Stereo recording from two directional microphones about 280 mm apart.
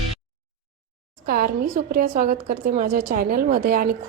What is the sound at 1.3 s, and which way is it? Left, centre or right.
A woman's voice, right.